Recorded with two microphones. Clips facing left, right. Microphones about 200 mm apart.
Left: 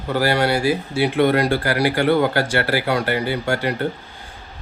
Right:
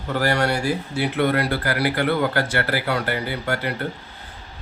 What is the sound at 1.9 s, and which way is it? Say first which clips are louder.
Speech: left 5 dB; 35° left (ahead or behind).